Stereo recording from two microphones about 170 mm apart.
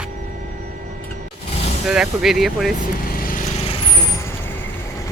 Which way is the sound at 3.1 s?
60° left (ahead or behind).